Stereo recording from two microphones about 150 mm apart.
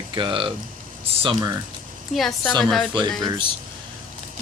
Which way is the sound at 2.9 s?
30° right (ahead or behind).